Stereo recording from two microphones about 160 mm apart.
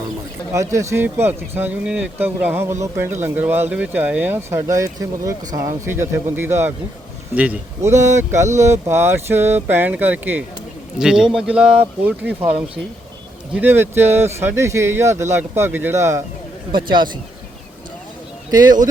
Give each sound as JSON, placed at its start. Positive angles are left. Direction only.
{"t": 0.5, "sound": "speech", "side_deg": -20}
{"t": 16.7, "sound": "speech", "side_deg": -30}